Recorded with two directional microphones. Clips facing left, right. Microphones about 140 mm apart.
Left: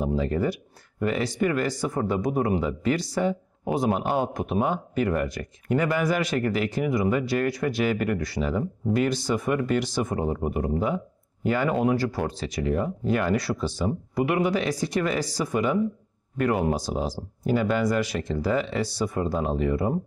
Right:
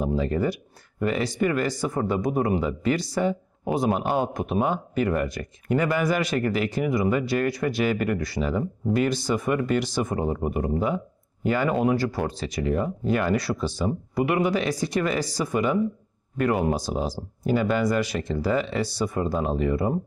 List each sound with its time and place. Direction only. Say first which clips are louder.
0.0 s speech: right 1 dB; 25° right (ahead or behind)
19.0 s speech: right 1 dB; 30° right (ahead or behind)